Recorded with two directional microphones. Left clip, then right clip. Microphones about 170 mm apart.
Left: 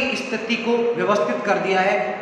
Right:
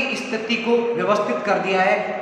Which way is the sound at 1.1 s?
5° right (ahead or behind).